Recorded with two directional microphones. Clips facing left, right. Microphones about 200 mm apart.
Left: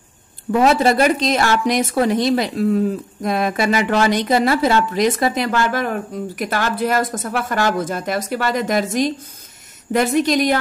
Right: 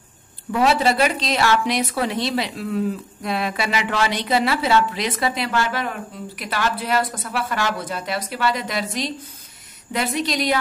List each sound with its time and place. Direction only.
0.5 s a woman's voice: 45° left (ahead or behind)